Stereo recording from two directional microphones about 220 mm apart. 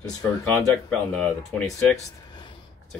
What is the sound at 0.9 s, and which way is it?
Speech, 5° left (ahead or behind).